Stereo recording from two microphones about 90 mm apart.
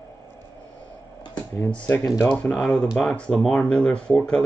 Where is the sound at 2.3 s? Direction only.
10° left (ahead or behind).